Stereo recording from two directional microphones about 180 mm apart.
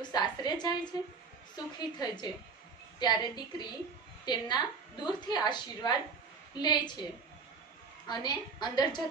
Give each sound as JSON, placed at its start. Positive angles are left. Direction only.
{"t": 0.1, "sound": "a woman's voice", "side_deg": 25}
{"t": 1.8, "sound": "a woman's voice", "side_deg": 25}
{"t": 8.1, "sound": "a woman's voice", "side_deg": 25}